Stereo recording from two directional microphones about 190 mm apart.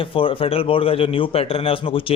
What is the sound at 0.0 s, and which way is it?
A man's voice, 30° left (ahead or behind).